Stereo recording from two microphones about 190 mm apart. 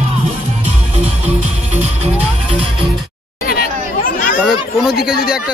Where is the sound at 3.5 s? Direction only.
50° left (ahead or behind).